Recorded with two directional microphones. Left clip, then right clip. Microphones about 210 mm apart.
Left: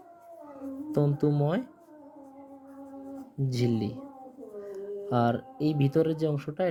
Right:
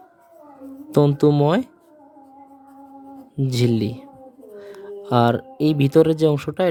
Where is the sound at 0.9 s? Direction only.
40° right (ahead or behind).